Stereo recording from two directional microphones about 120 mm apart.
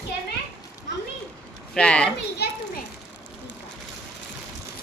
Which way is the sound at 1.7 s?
10° left (ahead or behind).